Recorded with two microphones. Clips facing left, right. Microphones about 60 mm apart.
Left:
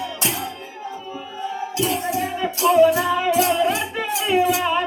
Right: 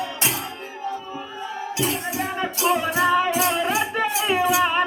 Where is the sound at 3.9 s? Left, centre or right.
Right.